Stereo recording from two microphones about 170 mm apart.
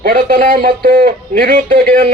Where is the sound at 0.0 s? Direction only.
60° right (ahead or behind).